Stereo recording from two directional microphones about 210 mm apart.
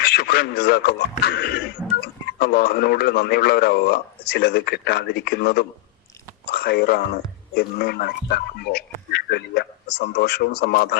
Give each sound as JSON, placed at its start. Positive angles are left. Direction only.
{"t": 0.0, "sound": "speech", "side_deg": 50}